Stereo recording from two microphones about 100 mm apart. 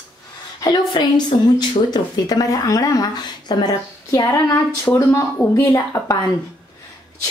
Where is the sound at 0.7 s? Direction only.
45° left (ahead or behind).